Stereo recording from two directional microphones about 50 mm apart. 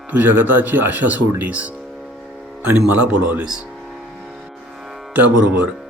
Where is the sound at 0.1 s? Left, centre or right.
Right.